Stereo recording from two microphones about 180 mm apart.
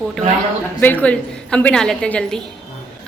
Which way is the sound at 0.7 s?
10° left (ahead or behind).